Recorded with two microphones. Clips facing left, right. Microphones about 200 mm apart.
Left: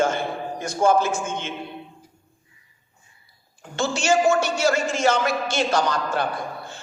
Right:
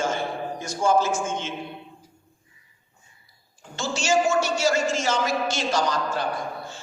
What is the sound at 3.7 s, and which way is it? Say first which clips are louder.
A man's voice: left 2 dB; 55° left (ahead or behind).